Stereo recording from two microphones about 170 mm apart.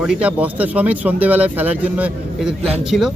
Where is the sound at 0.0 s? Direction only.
5° right (ahead or behind).